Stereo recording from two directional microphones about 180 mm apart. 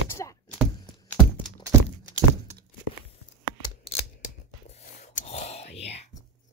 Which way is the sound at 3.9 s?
35° left (ahead or behind).